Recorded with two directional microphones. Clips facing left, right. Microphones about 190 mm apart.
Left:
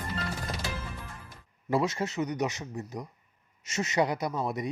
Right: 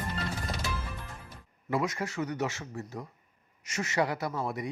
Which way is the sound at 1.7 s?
25° left (ahead or behind).